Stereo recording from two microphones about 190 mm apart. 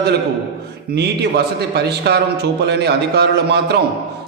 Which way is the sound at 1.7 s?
60° right (ahead or behind).